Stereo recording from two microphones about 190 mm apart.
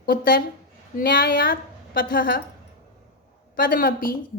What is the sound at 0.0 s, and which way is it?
A woman's voice, 50° left (ahead or behind).